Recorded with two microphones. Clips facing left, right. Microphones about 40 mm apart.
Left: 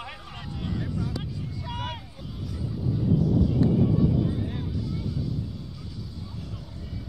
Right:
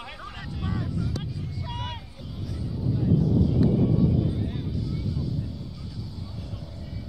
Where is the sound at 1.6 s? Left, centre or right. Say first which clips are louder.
Left 2 dB; centre.